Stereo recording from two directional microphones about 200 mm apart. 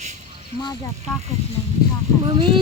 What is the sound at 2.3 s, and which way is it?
Speech, 25° right (ahead or behind).